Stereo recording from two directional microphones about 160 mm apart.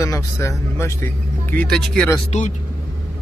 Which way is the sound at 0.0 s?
20° left (ahead or behind).